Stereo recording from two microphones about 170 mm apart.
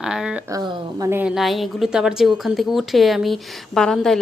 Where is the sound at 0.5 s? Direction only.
20° right (ahead or behind).